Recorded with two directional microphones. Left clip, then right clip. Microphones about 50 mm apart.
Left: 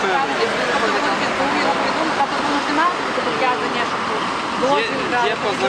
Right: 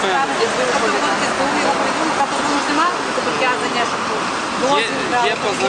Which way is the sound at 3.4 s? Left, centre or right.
Centre.